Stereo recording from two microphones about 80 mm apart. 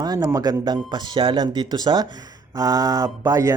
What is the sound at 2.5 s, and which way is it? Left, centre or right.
Mantra, right.